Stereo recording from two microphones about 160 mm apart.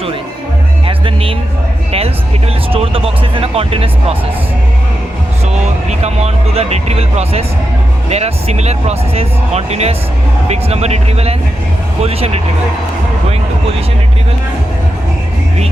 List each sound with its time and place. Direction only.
0.9 s music: 35° right (ahead or behind)
2.7 s speech: 35° right (ahead or behind)
5.9 s speech: 40° right (ahead or behind)